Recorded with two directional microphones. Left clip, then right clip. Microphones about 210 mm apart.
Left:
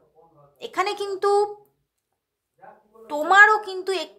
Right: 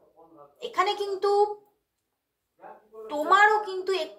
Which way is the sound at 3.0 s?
50° left (ahead or behind).